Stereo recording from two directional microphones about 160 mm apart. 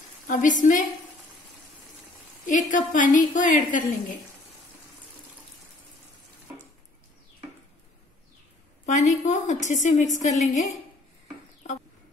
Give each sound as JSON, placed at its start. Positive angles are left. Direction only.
{"t": 0.3, "sound": "a woman's voice", "side_deg": 55}
{"t": 2.4, "sound": "a woman's voice", "side_deg": 55}
{"t": 8.8, "sound": "a woman's voice", "side_deg": 50}